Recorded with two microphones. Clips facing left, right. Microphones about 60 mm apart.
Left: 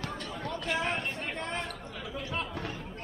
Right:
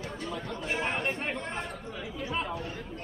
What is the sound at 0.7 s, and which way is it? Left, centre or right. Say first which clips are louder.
Chatter: right 3 dB; right.